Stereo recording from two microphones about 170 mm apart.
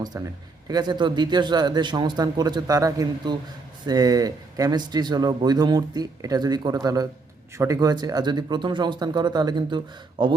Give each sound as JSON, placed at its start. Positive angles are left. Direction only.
{"t": 0.0, "sound": "speech", "side_deg": -20}